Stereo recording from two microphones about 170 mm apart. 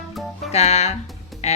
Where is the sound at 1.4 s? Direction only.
40° left (ahead or behind).